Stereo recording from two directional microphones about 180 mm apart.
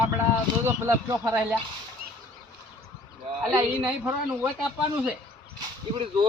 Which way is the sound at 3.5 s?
10° right (ahead or behind).